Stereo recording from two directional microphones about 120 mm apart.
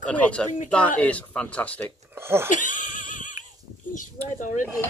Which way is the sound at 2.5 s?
90° left.